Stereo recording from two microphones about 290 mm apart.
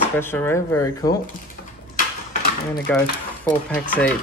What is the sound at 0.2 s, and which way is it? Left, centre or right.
Speech, centre.